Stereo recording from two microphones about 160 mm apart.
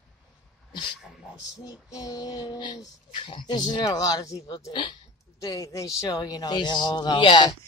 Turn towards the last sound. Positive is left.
turn(degrees=30)  # may be behind; listen again after turning